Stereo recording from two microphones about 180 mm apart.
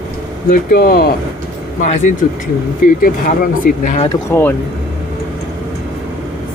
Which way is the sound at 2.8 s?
50° left (ahead or behind).